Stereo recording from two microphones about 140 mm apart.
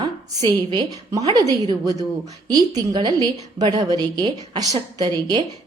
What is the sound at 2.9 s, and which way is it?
A woman's voice, 30° right (ahead or behind).